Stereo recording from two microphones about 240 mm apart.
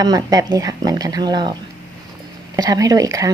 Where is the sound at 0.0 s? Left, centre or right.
Centre.